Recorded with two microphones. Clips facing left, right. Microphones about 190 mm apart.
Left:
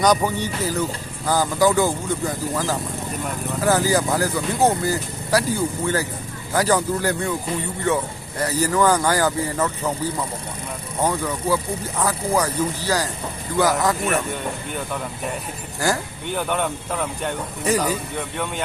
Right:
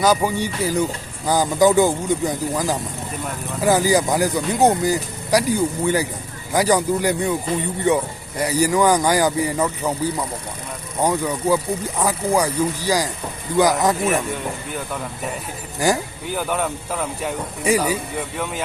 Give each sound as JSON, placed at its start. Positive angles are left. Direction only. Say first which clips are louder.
{"t": 0.0, "sound": "speech", "louder": "right 1 dB", "side_deg": -5}
{"t": 14.0, "sound": "speech", "louder": "right 2 dB", "side_deg": 0}
{"t": 15.8, "sound": "speech", "louder": "right 3 dB", "side_deg": -15}
{"t": 16.2, "sound": "speech", "louder": "left 1 dB", "side_deg": -5}